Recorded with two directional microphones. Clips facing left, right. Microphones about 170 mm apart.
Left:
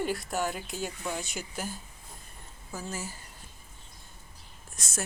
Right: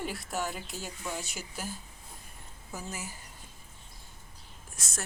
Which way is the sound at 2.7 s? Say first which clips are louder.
Left 3 dB; 15° right (ahead or behind).